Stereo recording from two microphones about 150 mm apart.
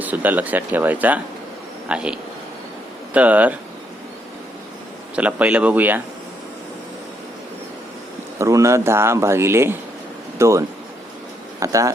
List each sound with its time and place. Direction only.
0.0 s speech: 10° right (ahead or behind)
5.1 s speech: 10° right (ahead or behind)
8.4 s speech: 20° right (ahead or behind)
11.6 s speech: 20° right (ahead or behind)